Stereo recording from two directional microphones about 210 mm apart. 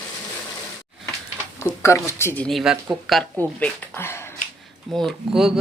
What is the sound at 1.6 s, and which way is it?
Speech, 10° left (ahead or behind).